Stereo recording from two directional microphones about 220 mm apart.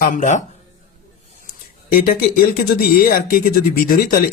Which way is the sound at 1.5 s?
40° left (ahead or behind).